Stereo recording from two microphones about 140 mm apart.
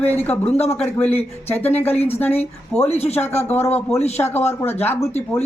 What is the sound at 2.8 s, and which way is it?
Speech, 50° left (ahead or behind).